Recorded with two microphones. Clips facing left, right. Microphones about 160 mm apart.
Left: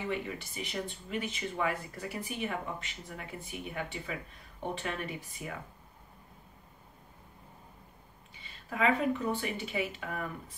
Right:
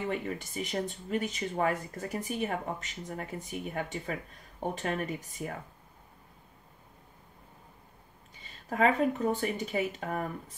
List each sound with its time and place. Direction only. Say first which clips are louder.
0.1 s speech: right 2 dB; 45° right (ahead or behind)
8.5 s speech: right 3 dB; 45° right (ahead or behind)